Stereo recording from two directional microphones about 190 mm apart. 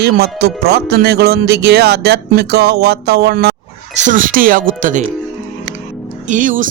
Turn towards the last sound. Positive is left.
turn(degrees=-45)  # may be behind; listen again after turning